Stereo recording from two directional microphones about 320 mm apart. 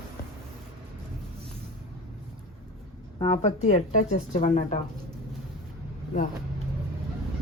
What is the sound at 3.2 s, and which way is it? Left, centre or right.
Speech, centre.